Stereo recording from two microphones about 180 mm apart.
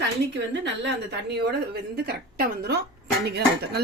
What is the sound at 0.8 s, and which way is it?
Speech, 65° right (ahead or behind).